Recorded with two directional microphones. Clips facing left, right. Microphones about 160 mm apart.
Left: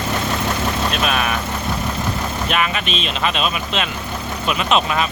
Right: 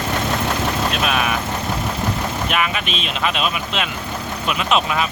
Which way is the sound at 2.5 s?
5° right (ahead or behind).